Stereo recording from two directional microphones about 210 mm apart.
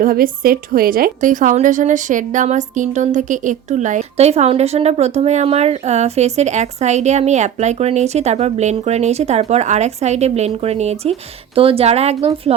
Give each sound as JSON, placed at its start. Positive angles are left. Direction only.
{"t": 0.0, "sound": "a woman's voice", "side_deg": -45}